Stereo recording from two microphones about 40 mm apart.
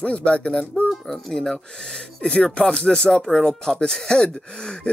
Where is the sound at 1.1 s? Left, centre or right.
Centre.